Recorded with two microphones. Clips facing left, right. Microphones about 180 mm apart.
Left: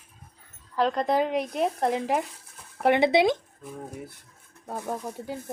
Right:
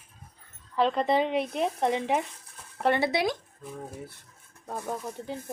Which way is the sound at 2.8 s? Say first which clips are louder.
Left 5 dB; 20° left (ahead or behind).